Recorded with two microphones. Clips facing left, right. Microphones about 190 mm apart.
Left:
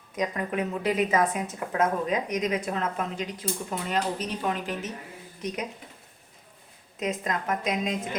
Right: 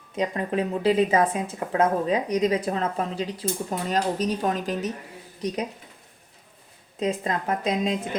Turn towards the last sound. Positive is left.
turn(degrees=-30)  # may be behind; listen again after turning